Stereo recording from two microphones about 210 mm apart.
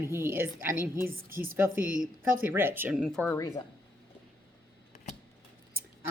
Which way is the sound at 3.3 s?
20° left (ahead or behind).